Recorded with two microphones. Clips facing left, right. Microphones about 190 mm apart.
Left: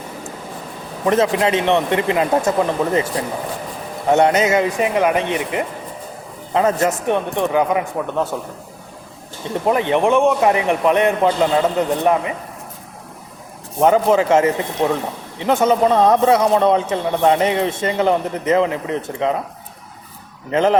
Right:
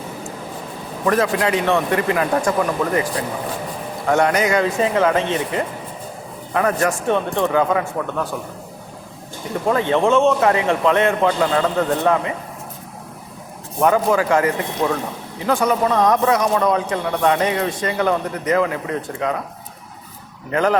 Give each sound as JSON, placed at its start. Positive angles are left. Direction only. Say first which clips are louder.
{"t": 1.0, "sound": "a man's voice", "louder": "left 2 dB", "side_deg": 20}
{"t": 9.6, "sound": "a man's voice", "louder": "left 1 dB", "side_deg": 20}
{"t": 13.7, "sound": "speech", "louder": "left 3 dB", "side_deg": 25}
{"t": 20.5, "sound": "speech", "louder": "left 2 dB", "side_deg": 25}